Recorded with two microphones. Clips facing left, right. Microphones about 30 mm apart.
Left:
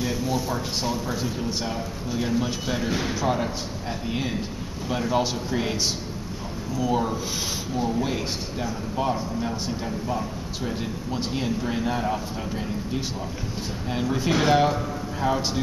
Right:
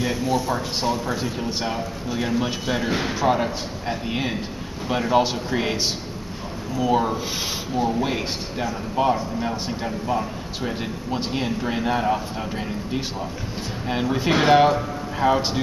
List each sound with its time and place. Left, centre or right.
0.0 s speech: centre
6.8 s speech: centre